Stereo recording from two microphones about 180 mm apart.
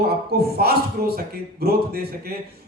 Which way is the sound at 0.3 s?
60° right (ahead or behind).